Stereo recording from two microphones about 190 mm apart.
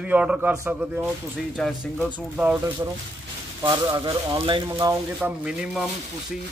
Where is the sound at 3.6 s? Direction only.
20° right (ahead or behind).